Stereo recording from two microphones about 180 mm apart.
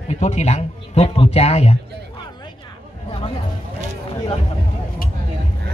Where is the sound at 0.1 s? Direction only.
40° left (ahead or behind).